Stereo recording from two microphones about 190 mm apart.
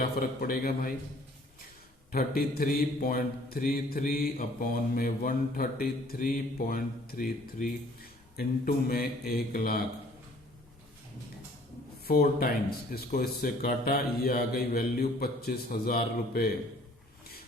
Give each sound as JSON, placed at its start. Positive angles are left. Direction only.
{"t": 0.2, "sound": "mantra", "side_deg": 50}
{"t": 2.1, "sound": "mantra", "side_deg": 50}
{"t": 12.0, "sound": "mantra", "side_deg": 50}